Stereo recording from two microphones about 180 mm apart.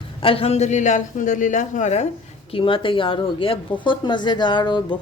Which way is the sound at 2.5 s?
30° left (ahead or behind).